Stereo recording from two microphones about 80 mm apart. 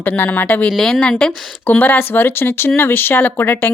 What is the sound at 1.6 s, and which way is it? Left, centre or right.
Speech, left.